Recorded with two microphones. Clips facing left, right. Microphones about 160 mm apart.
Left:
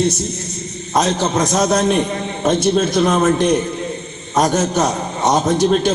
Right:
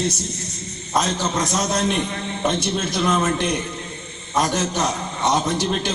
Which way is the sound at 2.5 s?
45° left (ahead or behind).